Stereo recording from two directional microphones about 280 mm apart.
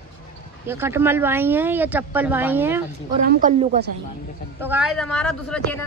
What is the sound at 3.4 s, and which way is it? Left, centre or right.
Speech, right.